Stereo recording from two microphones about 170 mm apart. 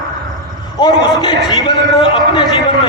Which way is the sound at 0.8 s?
25° left (ahead or behind).